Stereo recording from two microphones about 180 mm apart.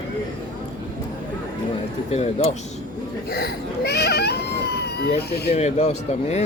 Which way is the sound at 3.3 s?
65° left (ahead or behind).